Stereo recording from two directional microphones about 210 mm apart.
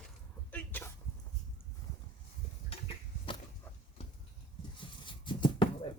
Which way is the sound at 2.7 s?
25° left (ahead or behind).